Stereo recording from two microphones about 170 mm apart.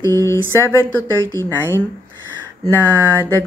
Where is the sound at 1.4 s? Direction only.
10° left (ahead or behind).